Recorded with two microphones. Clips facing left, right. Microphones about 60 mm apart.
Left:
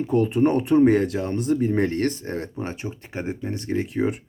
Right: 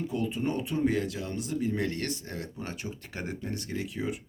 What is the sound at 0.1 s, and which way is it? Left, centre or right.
A man's voice, left.